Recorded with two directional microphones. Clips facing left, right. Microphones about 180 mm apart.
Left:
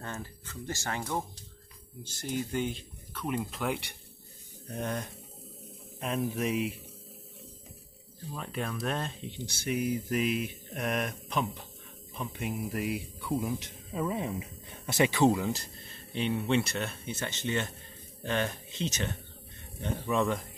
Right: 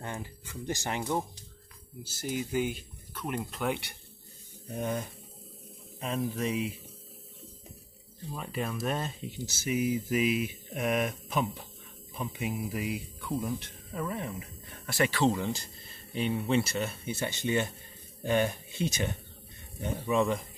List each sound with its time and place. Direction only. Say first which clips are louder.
0.0 s speech: right 1 dB; 15° right (ahead or behind)
2.0 s speech: even; 5° right (ahead or behind)
8.4 s speech: right 1 dB; centre (ahead or behind); by 15.4 s 15° left (ahead or behind)
15.4 s speech: left 1 dB; centre (ahead or behind)
19.8 s speech: right 1 dB; centre (ahead or behind)